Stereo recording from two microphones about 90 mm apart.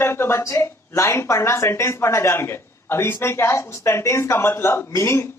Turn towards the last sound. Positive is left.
turn(degrees=30)  # may be behind; listen again after turning